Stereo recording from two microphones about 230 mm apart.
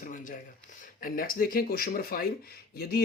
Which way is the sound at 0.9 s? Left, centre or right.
Left.